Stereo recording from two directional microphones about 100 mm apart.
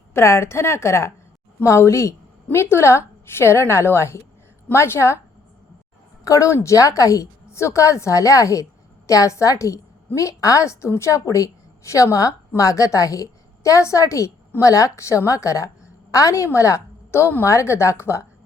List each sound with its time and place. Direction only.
0.1 s a woman's voice: 25° left (ahead or behind)
6.2 s a woman's voice: 35° left (ahead or behind)